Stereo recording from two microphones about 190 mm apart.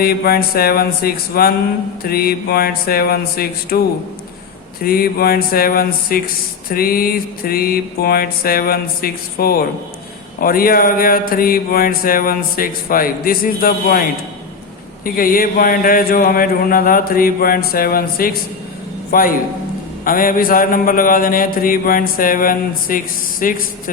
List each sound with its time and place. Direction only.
0.0 s speech: 55° left (ahead or behind)
4.8 s speech: 50° left (ahead or behind)
15.0 s speech: 50° left (ahead or behind)